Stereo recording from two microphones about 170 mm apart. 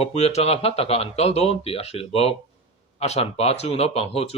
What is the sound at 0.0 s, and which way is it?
Speech, 40° left (ahead or behind).